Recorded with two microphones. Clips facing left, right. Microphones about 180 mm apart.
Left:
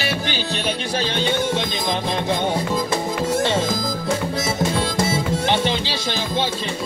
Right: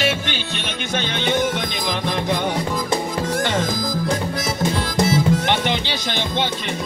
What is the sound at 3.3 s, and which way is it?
Music, 25° left (ahead or behind).